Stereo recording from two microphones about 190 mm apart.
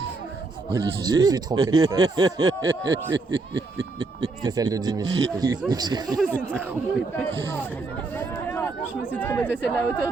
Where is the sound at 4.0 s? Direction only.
20° right (ahead or behind).